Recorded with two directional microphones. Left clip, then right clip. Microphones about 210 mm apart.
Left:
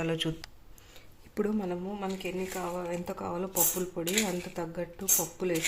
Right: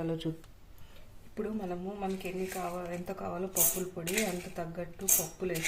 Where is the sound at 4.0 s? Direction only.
40° left (ahead or behind).